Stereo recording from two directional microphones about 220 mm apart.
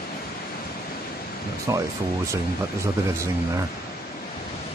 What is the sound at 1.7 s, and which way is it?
Speech, 15° right (ahead or behind).